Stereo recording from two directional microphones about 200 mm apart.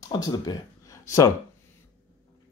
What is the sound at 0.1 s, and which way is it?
Speech, 20° left (ahead or behind).